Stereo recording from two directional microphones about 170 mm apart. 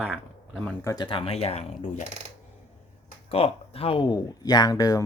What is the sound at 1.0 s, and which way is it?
Speech, 35° left (ahead or behind).